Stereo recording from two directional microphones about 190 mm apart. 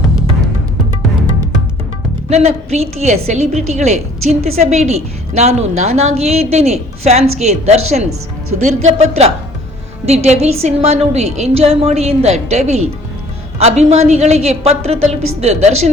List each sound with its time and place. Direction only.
2.3 s a woman's voice: 35° right (ahead or behind)